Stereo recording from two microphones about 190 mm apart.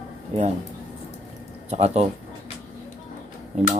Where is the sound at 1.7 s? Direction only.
35° right (ahead or behind).